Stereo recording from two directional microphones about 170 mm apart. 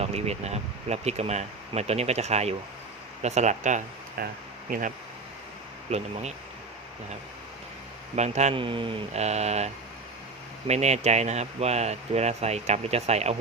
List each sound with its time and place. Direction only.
0.0 s speech: 40° right (ahead or behind)
4.2 s speech: 60° right (ahead or behind)
5.9 s speech: 40° right (ahead or behind)
8.1 s speech: 40° right (ahead or behind)